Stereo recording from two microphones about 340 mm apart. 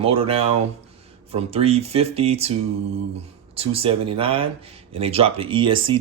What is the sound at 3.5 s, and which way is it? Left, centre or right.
Speech, centre.